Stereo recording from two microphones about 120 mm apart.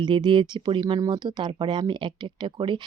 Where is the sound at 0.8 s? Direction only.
30° right (ahead or behind).